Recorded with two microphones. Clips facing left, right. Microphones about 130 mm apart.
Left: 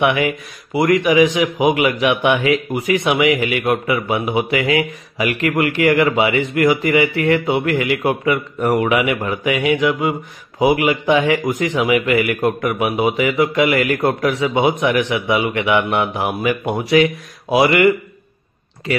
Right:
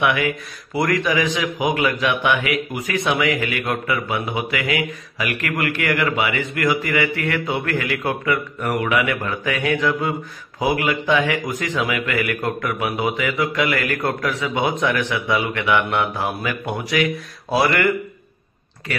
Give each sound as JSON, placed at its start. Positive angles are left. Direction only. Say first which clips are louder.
{"t": 0.0, "sound": "a man's voice", "louder": "left 3 dB", "side_deg": 25}
{"t": 3.1, "sound": "a man's voice", "louder": "left 3 dB", "side_deg": 15}
{"t": 17.5, "sound": "mantra", "louder": "left 5 dB", "side_deg": 15}
{"t": 18.9, "sound": "a man's voice", "louder": "left 7 dB", "side_deg": 20}